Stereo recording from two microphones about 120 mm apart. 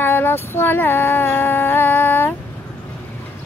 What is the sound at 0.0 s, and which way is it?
Female singing, 20° left (ahead or behind).